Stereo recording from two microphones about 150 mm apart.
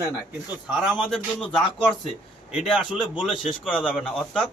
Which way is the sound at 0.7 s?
5° right (ahead or behind).